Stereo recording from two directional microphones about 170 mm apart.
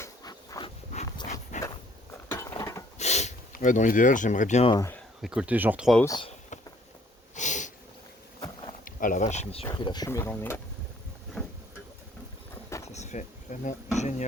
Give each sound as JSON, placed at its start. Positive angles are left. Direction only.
{"t": 0.0, "sound": "a sound", "side_deg": 20}
{"t": 1.3, "sound": "a sound", "side_deg": 45}
{"t": 2.3, "sound": "a sound", "side_deg": 20}
{"t": 3.0, "sound": "sniff", "side_deg": 40}
{"t": 3.5, "sound": "speech", "side_deg": 50}
{"t": 4.7, "sound": "speech", "side_deg": 20}
{"t": 4.9, "sound": "speech", "side_deg": -5}
{"t": 6.1, "sound": "speech", "side_deg": 30}
{"t": 7.3, "sound": "a sound", "side_deg": 45}
{"t": 8.8, "sound": "speech", "side_deg": 55}
{"t": 9.7, "sound": "speech", "side_deg": 25}
{"t": 10.1, "sound": "speech", "side_deg": 15}
{"t": 11.4, "sound": "boat", "side_deg": 5}
{"t": 12.9, "sound": "speech", "side_deg": 40}